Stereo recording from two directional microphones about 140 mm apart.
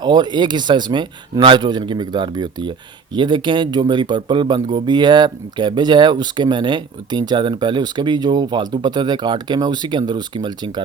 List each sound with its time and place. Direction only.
0.0 s speech: 30° right (ahead or behind)